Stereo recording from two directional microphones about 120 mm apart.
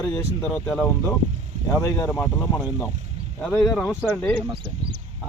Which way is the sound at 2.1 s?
15° left (ahead or behind).